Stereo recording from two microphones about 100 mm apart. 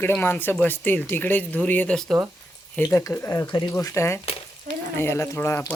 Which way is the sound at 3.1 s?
30° left (ahead or behind).